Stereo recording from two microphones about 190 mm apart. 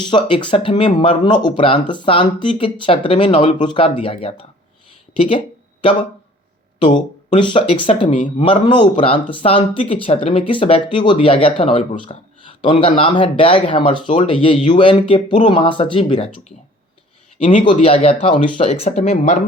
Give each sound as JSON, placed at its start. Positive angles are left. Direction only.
{"t": 0.1, "sound": "speech", "side_deg": 25}
{"t": 6.8, "sound": "speech", "side_deg": 40}
{"t": 7.3, "sound": "speech", "side_deg": 25}
{"t": 17.7, "sound": "speech", "side_deg": 30}